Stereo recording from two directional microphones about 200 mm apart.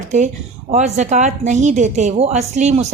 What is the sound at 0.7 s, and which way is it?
A woman's voice, 35° right (ahead or behind).